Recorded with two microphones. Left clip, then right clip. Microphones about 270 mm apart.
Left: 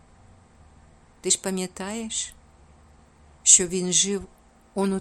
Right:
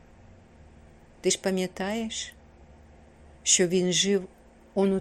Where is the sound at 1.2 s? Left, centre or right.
Centre.